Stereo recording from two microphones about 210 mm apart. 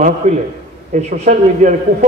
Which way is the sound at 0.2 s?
30° right (ahead or behind).